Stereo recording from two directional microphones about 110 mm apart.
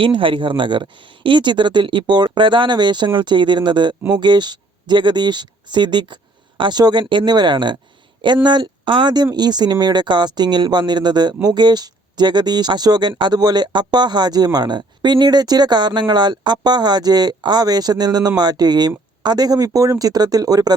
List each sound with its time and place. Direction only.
0.0 s speech: 50° right (ahead or behind); by 20.7 s 35° right (ahead or behind)